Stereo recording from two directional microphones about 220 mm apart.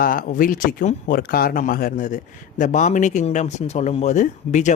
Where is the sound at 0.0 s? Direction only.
35° left (ahead or behind).